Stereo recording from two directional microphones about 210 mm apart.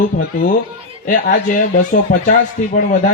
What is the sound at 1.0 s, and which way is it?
A man's voice, 40° left (ahead or behind).